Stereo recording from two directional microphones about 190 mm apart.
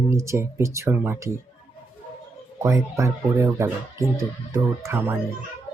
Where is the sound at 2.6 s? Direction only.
15° right (ahead or behind).